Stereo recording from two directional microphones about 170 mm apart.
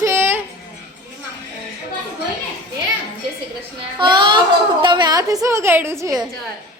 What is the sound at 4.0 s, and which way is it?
A child's voice, 30° right (ahead or behind).